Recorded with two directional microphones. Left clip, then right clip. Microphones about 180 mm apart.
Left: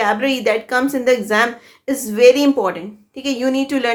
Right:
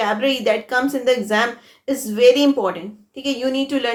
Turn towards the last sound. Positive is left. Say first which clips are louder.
# left 3 dB
turn(degrees=30)  # may be behind; listen again after turning